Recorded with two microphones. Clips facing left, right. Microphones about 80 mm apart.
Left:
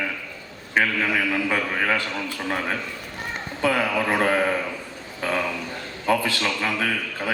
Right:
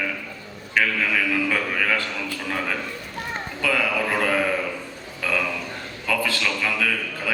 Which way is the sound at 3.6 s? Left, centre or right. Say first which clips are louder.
Left 2 dB; left.